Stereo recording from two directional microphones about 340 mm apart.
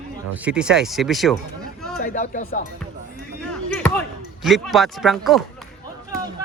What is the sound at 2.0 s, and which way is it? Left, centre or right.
Speech, left.